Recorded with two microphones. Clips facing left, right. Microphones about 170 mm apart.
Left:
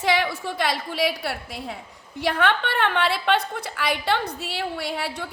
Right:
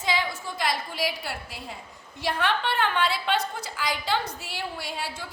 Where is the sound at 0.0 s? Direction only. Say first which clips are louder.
Left 5 dB; 65° left (ahead or behind).